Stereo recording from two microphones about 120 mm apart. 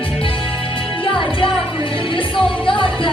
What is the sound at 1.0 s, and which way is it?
Music, 45° left (ahead or behind).